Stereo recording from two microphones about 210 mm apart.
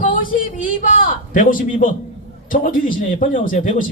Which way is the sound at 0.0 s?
40° left (ahead or behind).